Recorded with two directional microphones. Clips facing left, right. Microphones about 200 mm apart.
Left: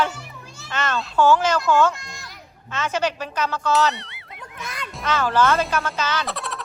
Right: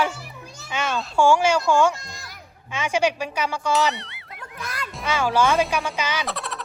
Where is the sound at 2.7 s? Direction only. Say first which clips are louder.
Right 2 dB; 10° right (ahead or behind).